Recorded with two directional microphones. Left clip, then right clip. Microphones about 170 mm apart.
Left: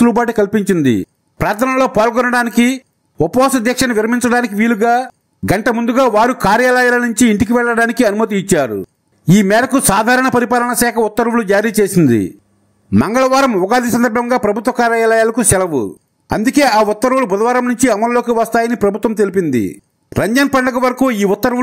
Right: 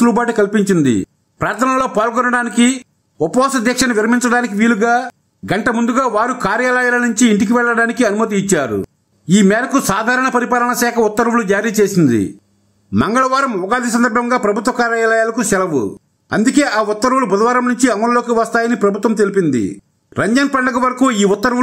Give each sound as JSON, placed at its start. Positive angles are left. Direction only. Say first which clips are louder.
{"t": 0.0, "sound": "speech", "louder": "left 1 dB", "side_deg": 35}
{"t": 13.0, "sound": "speech", "louder": "left 2 dB", "side_deg": 35}